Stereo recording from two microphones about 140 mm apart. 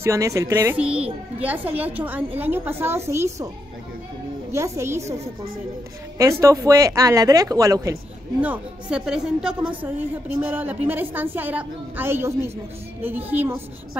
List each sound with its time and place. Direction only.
0.0 s speech: 20° right (ahead or behind)
0.7 s a woman's voice: 10° right (ahead or behind)
4.5 s speech: 20° right (ahead or behind)
6.4 s speech: 20° right (ahead or behind)
8.4 s a woman's voice: 10° right (ahead or behind)